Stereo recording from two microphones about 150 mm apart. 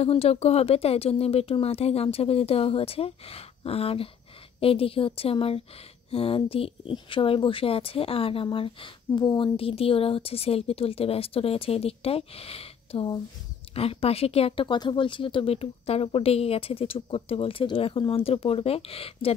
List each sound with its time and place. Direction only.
0.0 s speech: 40° left (ahead or behind)